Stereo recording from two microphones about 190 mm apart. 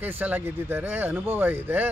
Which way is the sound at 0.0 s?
10° right (ahead or behind).